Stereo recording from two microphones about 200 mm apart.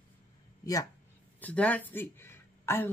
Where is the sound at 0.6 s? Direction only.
20° left (ahead or behind).